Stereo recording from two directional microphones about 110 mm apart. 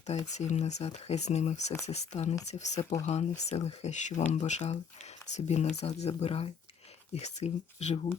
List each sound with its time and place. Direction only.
0.3 s speech: 90° left
2.5 s speech: 90° left
3.1 s speech: 80° left
7.2 s speech: 90° left